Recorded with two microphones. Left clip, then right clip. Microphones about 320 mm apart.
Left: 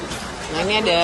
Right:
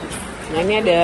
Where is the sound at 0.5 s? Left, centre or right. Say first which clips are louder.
Right 2 dB; centre.